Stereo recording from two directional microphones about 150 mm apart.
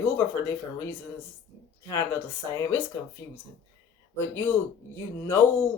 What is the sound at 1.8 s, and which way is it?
Speech, 15° left (ahead or behind).